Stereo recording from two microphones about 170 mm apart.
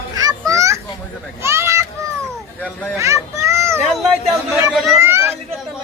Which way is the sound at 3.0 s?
15° right (ahead or behind).